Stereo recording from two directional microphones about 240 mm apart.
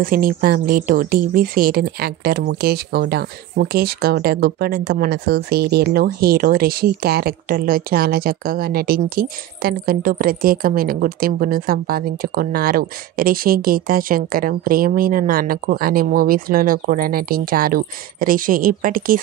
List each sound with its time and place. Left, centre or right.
0.0 s speech: right